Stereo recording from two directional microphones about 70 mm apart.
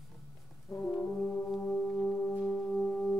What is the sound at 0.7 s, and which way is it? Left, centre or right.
Brass instrument, left.